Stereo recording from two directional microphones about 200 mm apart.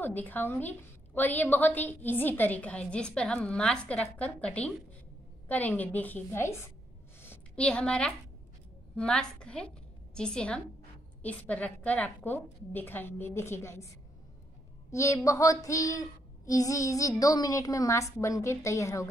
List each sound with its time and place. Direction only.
0.0 s a woman's voice: 10° left (ahead or behind)
7.2 s a sound: 10° left (ahead or behind)
8.9 s a woman's voice: 5° left (ahead or behind)